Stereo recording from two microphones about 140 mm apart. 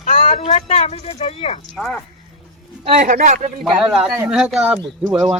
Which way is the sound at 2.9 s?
65° right (ahead or behind).